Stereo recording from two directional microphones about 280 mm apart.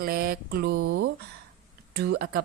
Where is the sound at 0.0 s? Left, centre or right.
Right.